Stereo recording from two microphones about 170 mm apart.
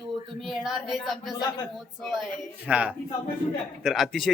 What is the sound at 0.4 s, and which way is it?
Speech, centre (ahead or behind).